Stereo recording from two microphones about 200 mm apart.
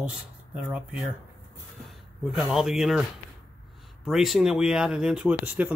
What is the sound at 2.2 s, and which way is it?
Speech, centre (ahead or behind).